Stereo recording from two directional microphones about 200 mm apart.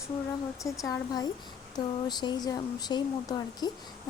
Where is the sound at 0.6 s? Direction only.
15° left (ahead or behind).